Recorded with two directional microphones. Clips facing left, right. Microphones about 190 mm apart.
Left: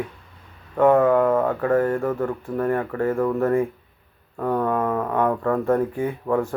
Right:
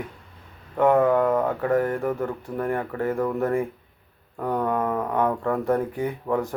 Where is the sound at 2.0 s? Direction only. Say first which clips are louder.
Left 2 dB; 15° right (ahead or behind).